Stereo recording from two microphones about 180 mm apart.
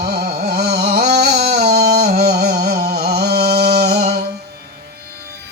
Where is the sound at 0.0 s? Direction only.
60° right (ahead or behind).